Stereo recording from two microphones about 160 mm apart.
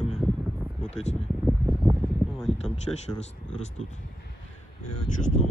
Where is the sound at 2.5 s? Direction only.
40° left (ahead or behind).